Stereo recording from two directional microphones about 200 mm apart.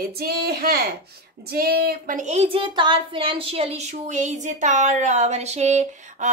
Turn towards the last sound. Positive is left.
turn(degrees=-35)  # may be behind; listen again after turning